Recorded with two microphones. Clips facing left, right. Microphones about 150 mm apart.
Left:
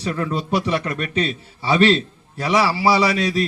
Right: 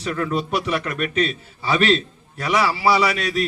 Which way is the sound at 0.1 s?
25° left (ahead or behind).